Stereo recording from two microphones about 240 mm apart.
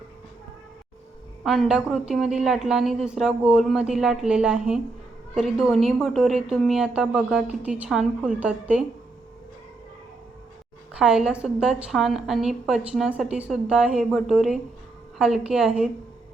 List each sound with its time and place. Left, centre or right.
1.5 s a woman's voice: centre
10.9 s a woman's voice: centre